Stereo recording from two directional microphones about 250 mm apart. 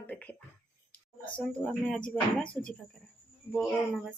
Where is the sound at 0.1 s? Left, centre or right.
Centre.